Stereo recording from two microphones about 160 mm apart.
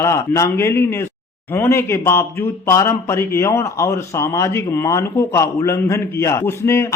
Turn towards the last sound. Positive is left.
turn(degrees=20)  # may be behind; listen again after turning